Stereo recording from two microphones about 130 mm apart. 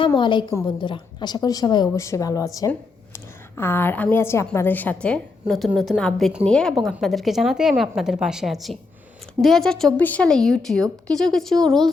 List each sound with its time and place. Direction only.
0.2 s a woman's voice: 40° left (ahead or behind); by 11.8 s 5° left (ahead or behind)